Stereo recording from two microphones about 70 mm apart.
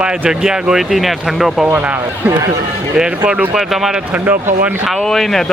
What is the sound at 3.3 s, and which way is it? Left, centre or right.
Speech, centre.